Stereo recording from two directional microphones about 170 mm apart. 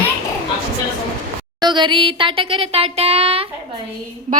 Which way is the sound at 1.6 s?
25° right (ahead or behind).